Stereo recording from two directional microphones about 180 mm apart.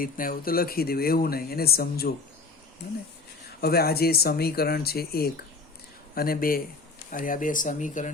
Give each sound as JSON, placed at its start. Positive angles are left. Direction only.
{"t": 0.0, "sound": "speech", "side_deg": 50}
{"t": 3.6, "sound": "speech", "side_deg": 60}